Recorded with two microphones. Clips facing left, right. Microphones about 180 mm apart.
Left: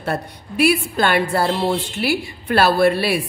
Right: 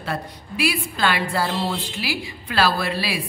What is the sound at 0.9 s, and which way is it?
A woman's voice, 55° left (ahead or behind).